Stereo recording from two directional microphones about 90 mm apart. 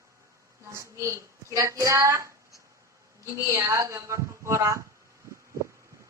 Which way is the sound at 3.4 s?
35° right (ahead or behind).